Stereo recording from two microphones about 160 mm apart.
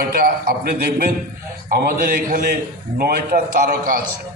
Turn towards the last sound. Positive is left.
turn(degrees=-60)  # may be behind; listen again after turning